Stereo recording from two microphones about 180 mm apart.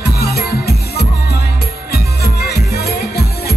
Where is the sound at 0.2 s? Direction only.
60° left (ahead or behind).